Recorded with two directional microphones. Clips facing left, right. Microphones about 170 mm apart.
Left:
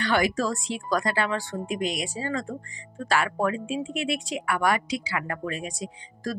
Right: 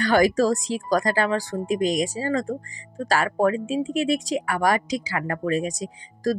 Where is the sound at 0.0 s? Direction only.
40° right (ahead or behind).